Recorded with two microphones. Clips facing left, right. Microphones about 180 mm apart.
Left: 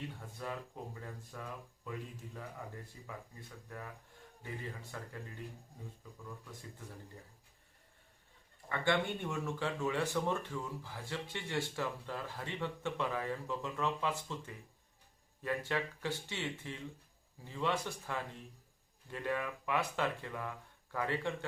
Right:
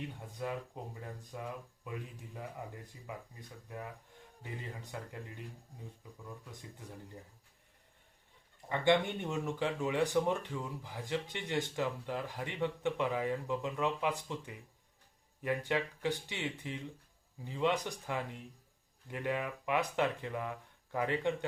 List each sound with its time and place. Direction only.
0.4 s speech: 15° right (ahead or behind)
4.8 s speech: 20° right (ahead or behind)
6.4 s speech: 20° right (ahead or behind)
8.7 s speech: 20° right (ahead or behind)